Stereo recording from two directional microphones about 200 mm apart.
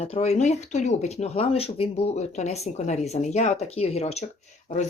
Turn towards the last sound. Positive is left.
turn(degrees=35)  # may be behind; listen again after turning